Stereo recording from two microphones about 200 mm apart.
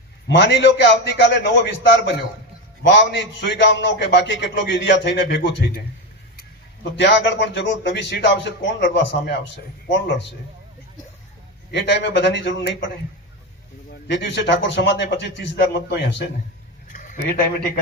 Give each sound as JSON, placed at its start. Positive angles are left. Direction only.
{"t": 0.3, "sound": "a man's voice", "side_deg": 60}
{"t": 6.9, "sound": "a man's voice", "side_deg": 60}
{"t": 11.7, "sound": "a man's voice", "side_deg": 60}
{"t": 13.9, "sound": "a man's voice", "side_deg": 65}
{"t": 16.9, "sound": "a sound", "side_deg": 45}